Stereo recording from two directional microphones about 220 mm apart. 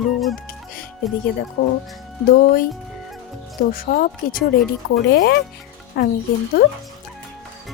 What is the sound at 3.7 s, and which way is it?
Speech, 40° left (ahead or behind).